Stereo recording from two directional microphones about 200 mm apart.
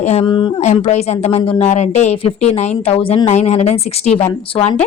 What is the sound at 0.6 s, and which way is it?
A woman's voice, 35° left (ahead or behind).